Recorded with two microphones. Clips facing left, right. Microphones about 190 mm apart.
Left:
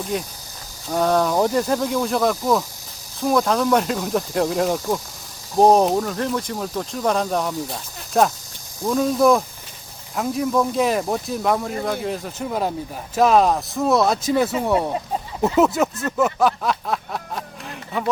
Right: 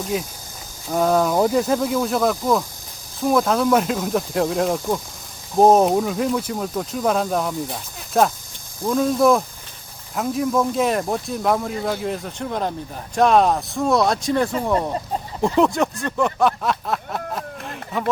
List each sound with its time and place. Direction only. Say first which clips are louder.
0.1 s speech: right 1 dB; 5° right (ahead or behind)